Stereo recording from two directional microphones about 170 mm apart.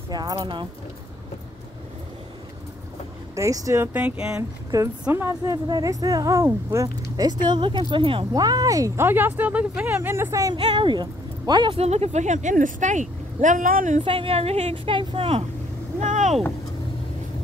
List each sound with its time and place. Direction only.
0.1 s speech: 25° right (ahead or behind)
3.3 s speech: 20° right (ahead or behind); by 14.0 s 50° right (ahead or behind)
14.0 s a woman's voice: 35° right (ahead or behind)
16.0 s boat: 45° right (ahead or behind)